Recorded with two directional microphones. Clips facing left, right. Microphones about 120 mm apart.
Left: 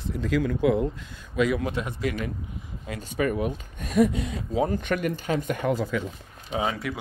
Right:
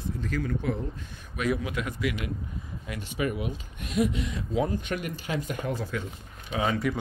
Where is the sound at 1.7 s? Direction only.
30° left (ahead or behind).